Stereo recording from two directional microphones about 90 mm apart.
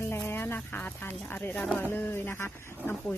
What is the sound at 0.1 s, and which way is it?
Speech, 25° left (ahead or behind).